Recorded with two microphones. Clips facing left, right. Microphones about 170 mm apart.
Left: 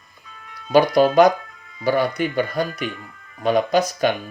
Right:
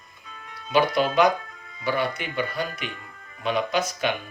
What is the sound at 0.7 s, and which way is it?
Speech, 40° left (ahead or behind).